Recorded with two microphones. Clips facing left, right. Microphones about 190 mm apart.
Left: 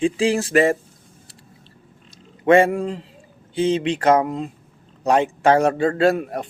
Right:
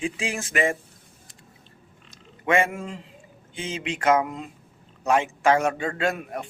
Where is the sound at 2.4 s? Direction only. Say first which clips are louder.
Left 8 dB; 35° left (ahead or behind).